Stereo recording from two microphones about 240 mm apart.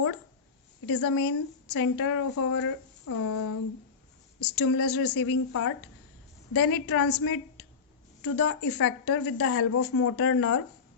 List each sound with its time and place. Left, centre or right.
0.9 s a woman's voice: left